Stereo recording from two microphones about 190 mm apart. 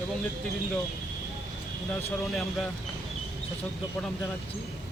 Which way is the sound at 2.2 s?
Centre (ahead or behind).